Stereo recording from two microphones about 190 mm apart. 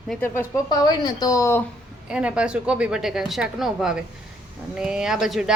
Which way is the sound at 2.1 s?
5° right (ahead or behind).